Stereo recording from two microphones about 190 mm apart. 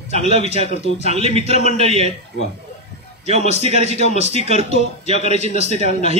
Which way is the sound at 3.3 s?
35° right (ahead or behind).